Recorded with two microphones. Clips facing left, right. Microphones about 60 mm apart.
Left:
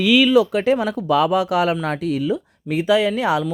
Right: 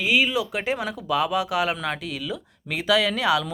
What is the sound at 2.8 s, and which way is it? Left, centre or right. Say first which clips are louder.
Speech: left 4 dB; left.